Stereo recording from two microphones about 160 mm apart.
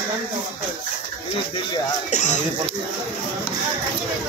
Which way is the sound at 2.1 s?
50° left (ahead or behind).